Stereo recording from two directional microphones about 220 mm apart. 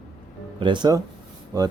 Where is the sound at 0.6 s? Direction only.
20° right (ahead or behind).